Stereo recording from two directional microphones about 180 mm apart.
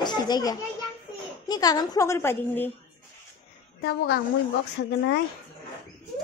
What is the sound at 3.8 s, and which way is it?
Speech, 70° left (ahead or behind).